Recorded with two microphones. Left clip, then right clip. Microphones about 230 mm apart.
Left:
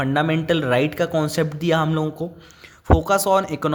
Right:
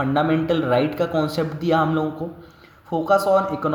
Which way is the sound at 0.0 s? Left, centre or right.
Left.